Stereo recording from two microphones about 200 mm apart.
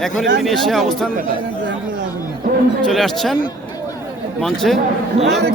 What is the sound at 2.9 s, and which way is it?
Speech, centre (ahead or behind).